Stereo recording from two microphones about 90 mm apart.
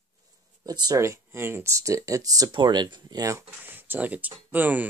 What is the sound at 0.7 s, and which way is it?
Speech, 45° right (ahead or behind).